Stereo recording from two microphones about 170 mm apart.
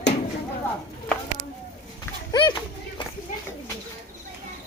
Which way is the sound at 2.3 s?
25° left (ahead or behind).